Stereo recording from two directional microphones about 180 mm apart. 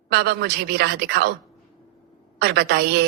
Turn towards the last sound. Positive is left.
turn(degrees=-65)  # may be behind; listen again after turning